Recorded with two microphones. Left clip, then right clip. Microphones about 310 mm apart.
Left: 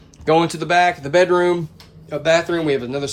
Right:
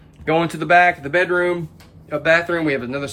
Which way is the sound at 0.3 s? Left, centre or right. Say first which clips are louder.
Even; centre.